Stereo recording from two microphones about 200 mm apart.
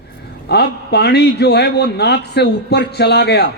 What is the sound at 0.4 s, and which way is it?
A man's voice, 55° left (ahead or behind).